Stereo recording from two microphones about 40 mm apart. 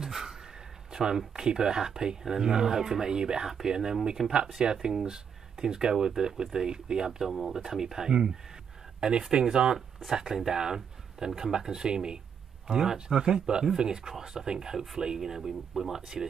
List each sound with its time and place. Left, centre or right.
0.0 s a sound: centre
0.9 s speech: centre
9.8 s speech: centre